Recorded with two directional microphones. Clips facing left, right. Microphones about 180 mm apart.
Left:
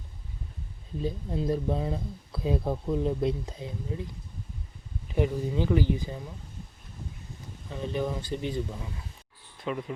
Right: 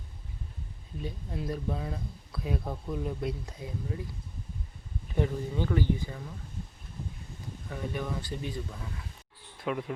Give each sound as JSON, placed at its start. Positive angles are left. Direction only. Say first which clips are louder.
{"t": 1.0, "sound": "speech", "louder": "left 7 dB", "side_deg": 25}
{"t": 5.1, "sound": "speech", "louder": "left 3 dB", "side_deg": 15}
{"t": 7.7, "sound": "speech", "louder": "left 4 dB", "side_deg": 25}
{"t": 9.6, "sound": "a sound", "louder": "even", "side_deg": -5}